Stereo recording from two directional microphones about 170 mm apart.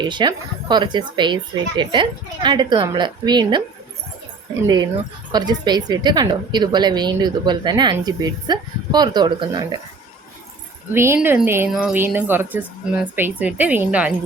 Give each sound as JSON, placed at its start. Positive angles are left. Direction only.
{"t": 0.0, "sound": "speech", "side_deg": -25}
{"t": 5.3, "sound": "speech", "side_deg": -25}
{"t": 10.9, "sound": "speech", "side_deg": -15}